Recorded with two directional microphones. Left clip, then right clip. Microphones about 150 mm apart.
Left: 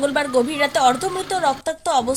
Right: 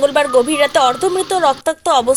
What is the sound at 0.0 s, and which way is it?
A woman's voice, 30° right (ahead or behind).